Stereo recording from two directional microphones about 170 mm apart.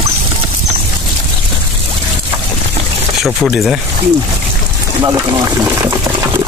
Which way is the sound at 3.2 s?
Centre (ahead or behind).